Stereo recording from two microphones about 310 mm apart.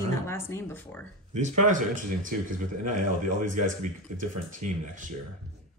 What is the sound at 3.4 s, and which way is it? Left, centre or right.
Speech, right.